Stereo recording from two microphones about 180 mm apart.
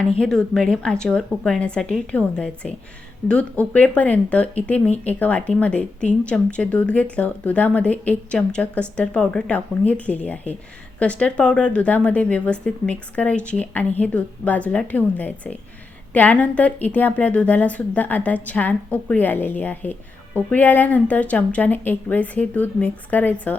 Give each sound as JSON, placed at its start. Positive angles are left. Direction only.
{"t": 0.2, "sound": "a woman's voice", "side_deg": 5}